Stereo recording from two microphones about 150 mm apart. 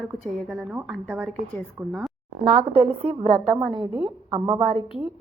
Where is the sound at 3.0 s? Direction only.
40° right (ahead or behind).